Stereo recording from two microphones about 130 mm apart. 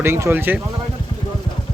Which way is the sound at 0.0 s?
20° right (ahead or behind).